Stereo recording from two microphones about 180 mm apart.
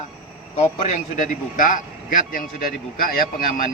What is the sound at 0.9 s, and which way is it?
A man's voice, 45° left (ahead or behind).